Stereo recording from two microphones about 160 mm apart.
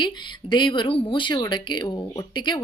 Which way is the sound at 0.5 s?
30° left (ahead or behind).